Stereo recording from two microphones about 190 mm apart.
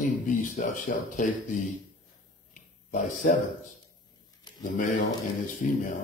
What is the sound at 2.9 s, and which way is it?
Speech, 40° left (ahead or behind).